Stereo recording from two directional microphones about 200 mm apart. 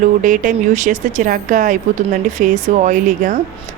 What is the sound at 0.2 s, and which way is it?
Speech, 40° right (ahead or behind).